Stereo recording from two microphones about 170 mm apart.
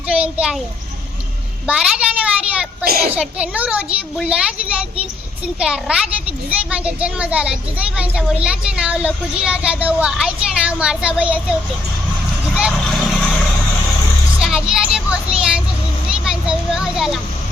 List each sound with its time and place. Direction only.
0.1 s a sound: 5° right (ahead or behind)
1.6 s a child's voice: 5° right (ahead or behind)
2.8 s a child's voice: 65° right (ahead or behind)
3.2 s a child's voice: 5° right (ahead or behind)
12.5 s vehicle: 5° right (ahead or behind)
14.4 s a sound: 5° right (ahead or behind)
16.0 s children playing: 5° right (ahead or behind)